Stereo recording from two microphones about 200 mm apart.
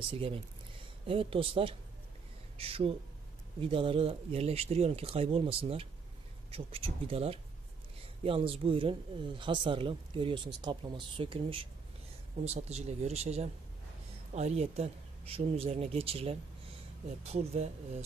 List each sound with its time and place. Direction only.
0.1 s speech: 30° right (ahead or behind)